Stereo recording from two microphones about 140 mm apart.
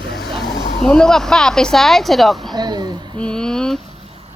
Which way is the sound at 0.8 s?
5° left (ahead or behind).